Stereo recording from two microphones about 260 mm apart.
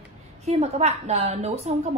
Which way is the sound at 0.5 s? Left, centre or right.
Right.